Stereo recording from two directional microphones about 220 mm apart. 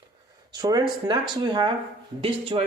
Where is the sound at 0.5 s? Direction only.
20° right (ahead or behind).